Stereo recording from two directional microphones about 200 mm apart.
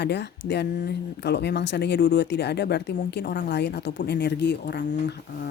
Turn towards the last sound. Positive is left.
turn(degrees=55)  # may be behind; listen again after turning